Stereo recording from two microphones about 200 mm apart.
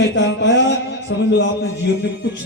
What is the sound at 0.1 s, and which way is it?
A man's voice, 65° left (ahead or behind).